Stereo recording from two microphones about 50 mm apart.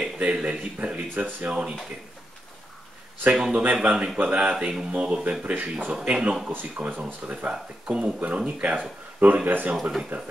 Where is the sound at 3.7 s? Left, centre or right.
Right.